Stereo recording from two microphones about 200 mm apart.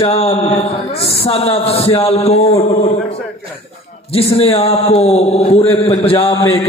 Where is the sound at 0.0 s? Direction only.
30° left (ahead or behind).